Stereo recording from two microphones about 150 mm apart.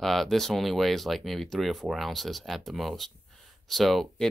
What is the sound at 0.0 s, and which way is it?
Speech, centre (ahead or behind).